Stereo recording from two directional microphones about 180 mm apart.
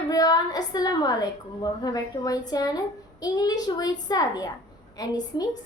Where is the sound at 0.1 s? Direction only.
20° left (ahead or behind).